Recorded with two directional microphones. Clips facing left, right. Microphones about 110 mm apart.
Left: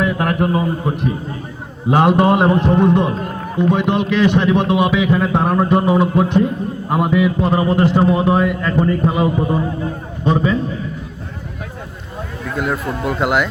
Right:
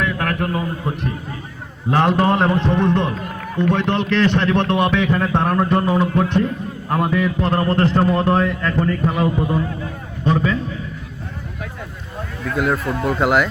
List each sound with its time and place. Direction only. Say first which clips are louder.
0.0 s a man's voice: left 4 dB; 20° left (ahead or behind)
0.9 s speech: left 4 dB; 5° left (ahead or behind)
1.9 s speech: left 3 dB; 15° left (ahead or behind)
3.1 s run: left 4 dB; 30° left (ahead or behind)
3.5 s a man's voice: left 2 dB; 10° left (ahead or behind)
12.5 s speech: right 1 dB; centre (ahead or behind)